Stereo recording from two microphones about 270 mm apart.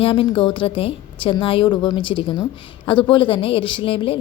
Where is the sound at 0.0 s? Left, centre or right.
Centre.